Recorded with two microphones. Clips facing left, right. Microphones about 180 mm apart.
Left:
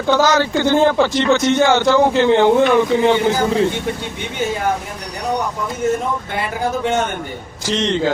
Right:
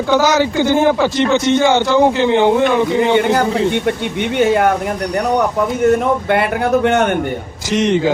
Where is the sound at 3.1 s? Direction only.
65° right (ahead or behind).